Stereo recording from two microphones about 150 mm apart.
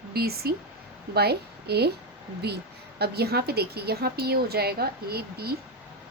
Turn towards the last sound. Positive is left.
turn(degrees=-90)